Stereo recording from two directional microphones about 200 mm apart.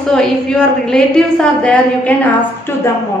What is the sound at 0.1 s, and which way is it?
A woman's voice, 5° left (ahead or behind).